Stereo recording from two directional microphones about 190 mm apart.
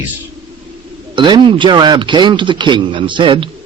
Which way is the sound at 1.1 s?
25° right (ahead or behind).